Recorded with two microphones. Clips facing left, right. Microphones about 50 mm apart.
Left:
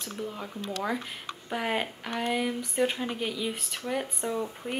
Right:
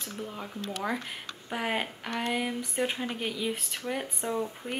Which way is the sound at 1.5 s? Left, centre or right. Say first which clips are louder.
Left 1 dB; centre.